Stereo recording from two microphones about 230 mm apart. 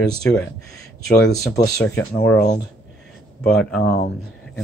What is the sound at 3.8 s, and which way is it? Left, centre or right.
Speech, left.